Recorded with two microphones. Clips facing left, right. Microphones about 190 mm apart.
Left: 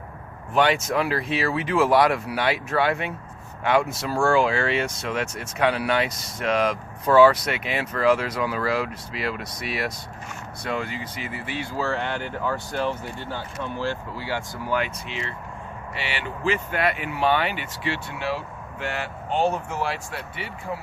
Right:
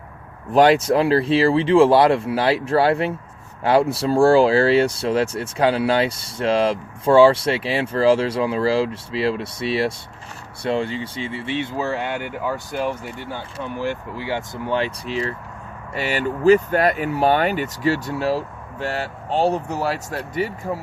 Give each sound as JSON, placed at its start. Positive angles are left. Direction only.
{"t": 0.5, "sound": "speech", "side_deg": -35}